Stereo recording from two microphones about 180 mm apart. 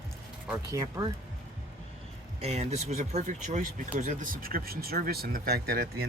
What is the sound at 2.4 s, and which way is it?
Speech, 35° right (ahead or behind).